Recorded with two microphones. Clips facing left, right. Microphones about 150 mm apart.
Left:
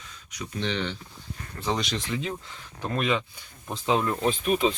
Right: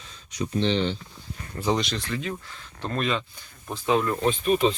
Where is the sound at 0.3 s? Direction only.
30° right (ahead or behind).